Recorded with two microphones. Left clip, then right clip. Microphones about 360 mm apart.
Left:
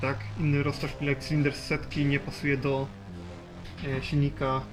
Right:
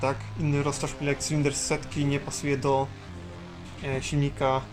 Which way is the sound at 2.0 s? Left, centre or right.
Centre.